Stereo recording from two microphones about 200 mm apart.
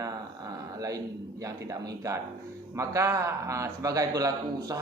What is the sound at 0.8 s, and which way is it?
A man's voice, 15° right (ahead or behind).